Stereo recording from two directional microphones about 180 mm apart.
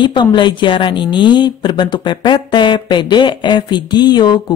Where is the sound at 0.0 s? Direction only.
25° left (ahead or behind).